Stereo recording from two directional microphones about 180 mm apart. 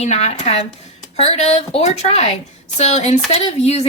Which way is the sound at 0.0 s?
40° left (ahead or behind).